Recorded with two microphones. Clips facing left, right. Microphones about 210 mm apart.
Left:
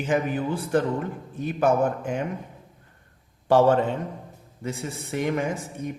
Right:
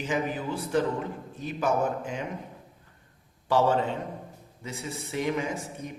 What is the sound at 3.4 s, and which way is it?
Speech, 50° left (ahead or behind).